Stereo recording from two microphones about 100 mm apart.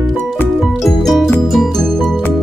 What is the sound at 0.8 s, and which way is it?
Music, 5° left (ahead or behind).